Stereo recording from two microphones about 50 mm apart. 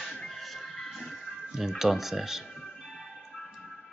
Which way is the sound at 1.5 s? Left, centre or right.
Centre.